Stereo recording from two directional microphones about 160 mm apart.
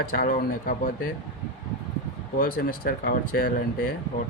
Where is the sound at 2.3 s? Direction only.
65° left (ahead or behind).